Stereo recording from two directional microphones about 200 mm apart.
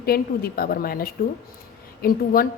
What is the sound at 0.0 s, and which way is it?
A woman's voice, 50° left (ahead or behind).